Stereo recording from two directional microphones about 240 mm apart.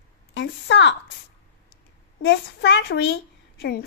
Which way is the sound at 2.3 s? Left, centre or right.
Left.